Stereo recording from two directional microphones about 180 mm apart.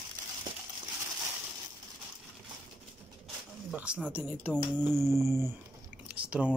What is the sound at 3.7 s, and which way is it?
Speech, 5° right (ahead or behind).